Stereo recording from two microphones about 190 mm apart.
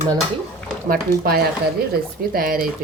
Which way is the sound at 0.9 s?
50° right (ahead or behind).